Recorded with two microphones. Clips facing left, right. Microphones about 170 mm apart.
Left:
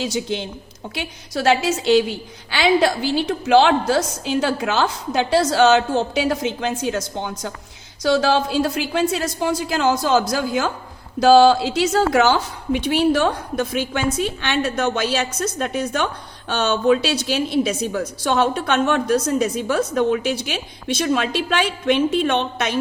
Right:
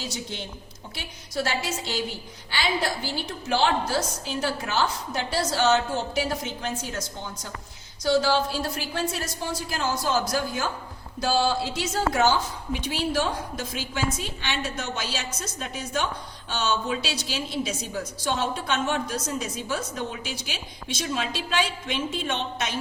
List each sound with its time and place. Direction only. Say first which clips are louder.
0.0 s a woman's voice: left 10 dB; 90° left
8.0 s a woman's voice: left 5 dB; 90° left; by 22.8 s 65° left (ahead or behind)